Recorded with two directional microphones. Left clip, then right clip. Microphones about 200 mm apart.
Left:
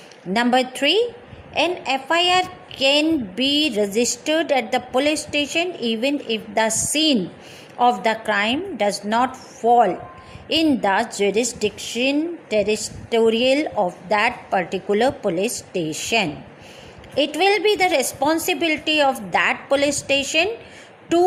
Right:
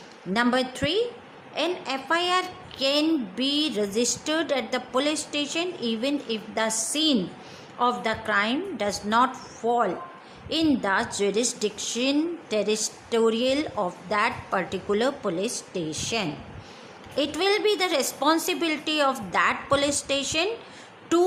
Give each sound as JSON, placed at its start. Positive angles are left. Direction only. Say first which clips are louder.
{"t": 0.3, "sound": "a woman's voice", "louder": "left 5 dB", "side_deg": 15}
{"t": 17.3, "sound": "a woman's voice", "louder": "left 5 dB", "side_deg": 15}